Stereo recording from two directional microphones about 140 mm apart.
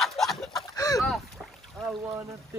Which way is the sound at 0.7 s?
25° left (ahead or behind).